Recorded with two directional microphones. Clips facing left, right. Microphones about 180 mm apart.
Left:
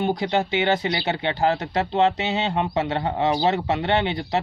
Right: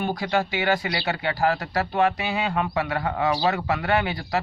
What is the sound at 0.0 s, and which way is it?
Speech, 20° left (ahead or behind).